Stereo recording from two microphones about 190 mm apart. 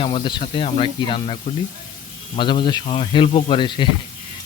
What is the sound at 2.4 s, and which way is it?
Speech, 25° left (ahead or behind).